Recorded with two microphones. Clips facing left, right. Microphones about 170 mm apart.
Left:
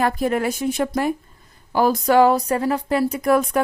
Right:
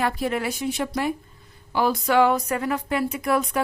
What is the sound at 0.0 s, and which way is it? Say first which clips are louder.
Speech: left 4 dB; 45° left (ahead or behind).